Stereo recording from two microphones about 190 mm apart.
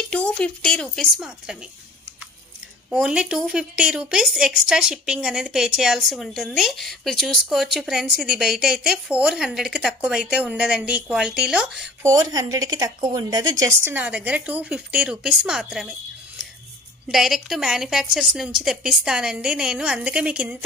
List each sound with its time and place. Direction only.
0.1 s a woman's voice: 5° left (ahead or behind)
2.9 s a woman's voice: 5° right (ahead or behind)
12.0 s a woman's voice: 15° right (ahead or behind); by 16.0 s centre (ahead or behind)
17.1 s a woman's voice: centre (ahead or behind)